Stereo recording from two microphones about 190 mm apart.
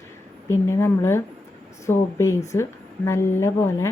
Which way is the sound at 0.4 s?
15° left (ahead or behind).